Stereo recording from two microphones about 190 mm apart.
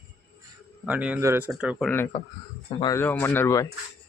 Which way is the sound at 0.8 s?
5° right (ahead or behind).